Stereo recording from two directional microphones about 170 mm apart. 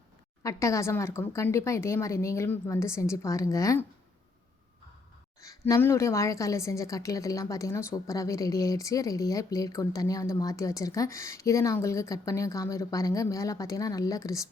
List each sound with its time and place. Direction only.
0.4 s speech: 20° left (ahead or behind)
5.4 s a woman's voice: 20° left (ahead or behind)